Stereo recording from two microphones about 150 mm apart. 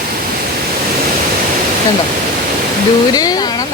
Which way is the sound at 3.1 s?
25° left (ahead or behind).